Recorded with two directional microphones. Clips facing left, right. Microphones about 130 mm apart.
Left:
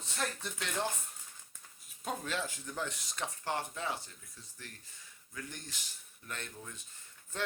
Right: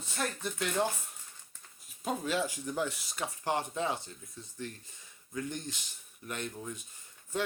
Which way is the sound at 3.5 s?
20° right (ahead or behind).